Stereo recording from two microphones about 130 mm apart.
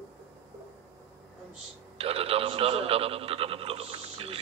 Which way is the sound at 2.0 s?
50° right (ahead or behind).